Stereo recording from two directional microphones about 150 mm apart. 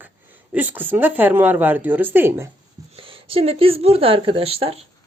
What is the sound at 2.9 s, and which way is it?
Speech, 35° right (ahead or behind).